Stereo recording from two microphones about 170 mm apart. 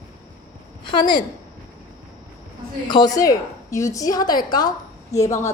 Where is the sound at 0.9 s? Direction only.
25° left (ahead or behind).